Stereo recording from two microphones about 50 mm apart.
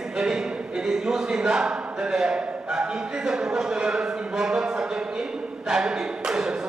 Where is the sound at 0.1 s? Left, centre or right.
Centre.